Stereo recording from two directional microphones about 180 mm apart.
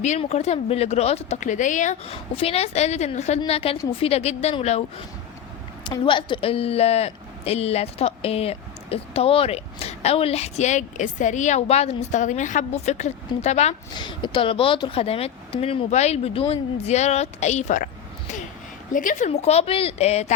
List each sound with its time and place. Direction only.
0.0 s a woman's voice: 40° left (ahead or behind)
13.9 s a woman's voice: 25° left (ahead or behind); by 17.8 s 40° left (ahead or behind)
18.9 s a woman's voice: 45° left (ahead or behind)